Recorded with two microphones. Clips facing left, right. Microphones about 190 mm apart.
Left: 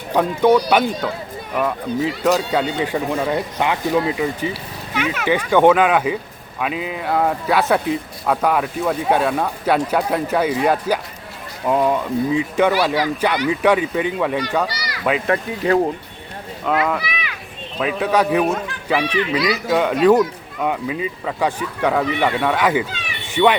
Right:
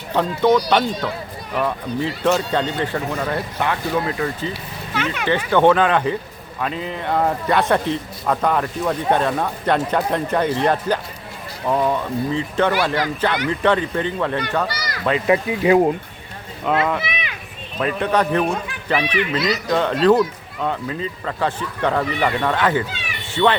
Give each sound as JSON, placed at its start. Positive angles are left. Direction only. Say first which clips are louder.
{"t": 0.1, "sound": "speech", "louder": "left 2 dB", "side_deg": 10}
{"t": 14.7, "sound": "a sound", "louder": "right 1 dB", "side_deg": -45}
{"t": 15.3, "sound": "speech", "louder": "right 5 dB", "side_deg": -10}
{"t": 16.7, "sound": "speech", "louder": "even", "side_deg": 0}
{"t": 17.0, "sound": "a sound", "louder": "right 1 dB", "side_deg": -20}
{"t": 17.7, "sound": "speech", "louder": "left 1 dB", "side_deg": 5}